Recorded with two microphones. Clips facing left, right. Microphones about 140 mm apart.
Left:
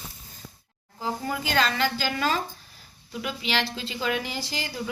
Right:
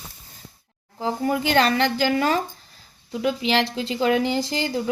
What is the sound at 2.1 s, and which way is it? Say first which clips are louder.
Speech: right 6 dB; 20° right (ahead or behind).